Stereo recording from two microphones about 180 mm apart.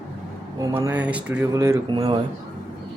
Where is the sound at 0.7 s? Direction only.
10° right (ahead or behind).